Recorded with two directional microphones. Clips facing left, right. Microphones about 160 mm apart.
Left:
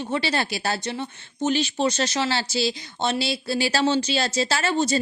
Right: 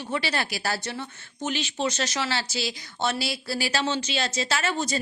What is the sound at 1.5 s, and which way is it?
Speech, 35° left (ahead or behind).